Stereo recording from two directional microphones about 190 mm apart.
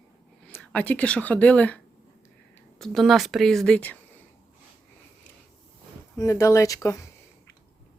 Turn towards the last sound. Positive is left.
turn(degrees=15)  # may be behind; listen again after turning